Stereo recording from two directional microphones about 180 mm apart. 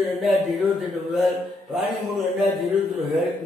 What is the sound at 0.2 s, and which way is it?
A man's voice, centre (ahead or behind).